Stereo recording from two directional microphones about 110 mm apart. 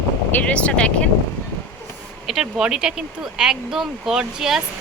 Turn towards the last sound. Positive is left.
turn(degrees=-5)  # may be behind; listen again after turning